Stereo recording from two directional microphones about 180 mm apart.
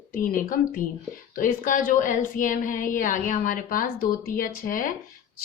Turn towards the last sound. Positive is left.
turn(degrees=50)  # may be behind; listen again after turning